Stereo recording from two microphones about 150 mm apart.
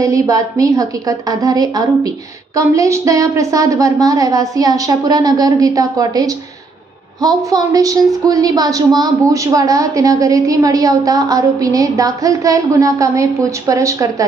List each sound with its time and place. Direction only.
0.0 s a woman's voice: 20° right (ahead or behind)